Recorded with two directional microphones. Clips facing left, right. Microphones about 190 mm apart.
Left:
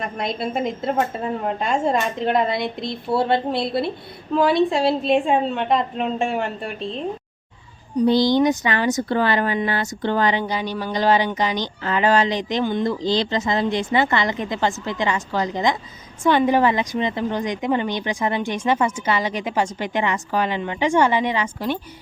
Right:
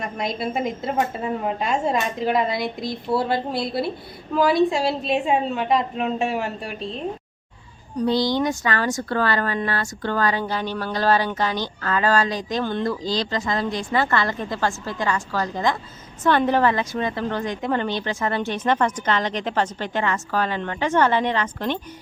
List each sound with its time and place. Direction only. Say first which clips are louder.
0.0 s a woman's voice: left 1 dB; centre (ahead or behind)
8.0 s a woman's voice: left 4 dB; centre (ahead or behind)
8.4 s speech: left 3 dB; 20° left (ahead or behind)